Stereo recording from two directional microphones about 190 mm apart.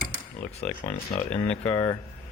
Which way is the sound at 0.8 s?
35° left (ahead or behind).